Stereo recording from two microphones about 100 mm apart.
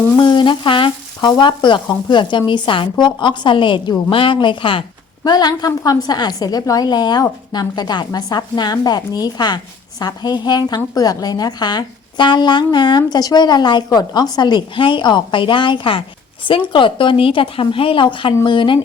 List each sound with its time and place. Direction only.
0.2 s frying: 55° left (ahead or behind)
3.0 s a woman's voice: 50° left (ahead or behind)
5.2 s a woman's voice: 45° left (ahead or behind)